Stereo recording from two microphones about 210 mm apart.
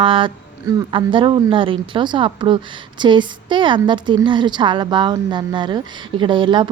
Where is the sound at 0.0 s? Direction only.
25° right (ahead or behind).